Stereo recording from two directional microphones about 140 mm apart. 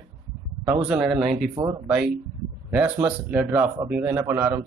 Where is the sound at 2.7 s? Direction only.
10° right (ahead or behind).